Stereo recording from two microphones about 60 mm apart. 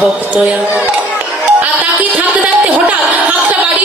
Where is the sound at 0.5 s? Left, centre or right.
Right.